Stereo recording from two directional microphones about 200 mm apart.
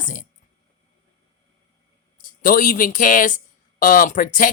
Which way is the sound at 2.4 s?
45° left (ahead or behind).